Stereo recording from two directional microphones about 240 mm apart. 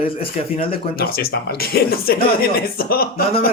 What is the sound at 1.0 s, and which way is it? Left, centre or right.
Speech, left.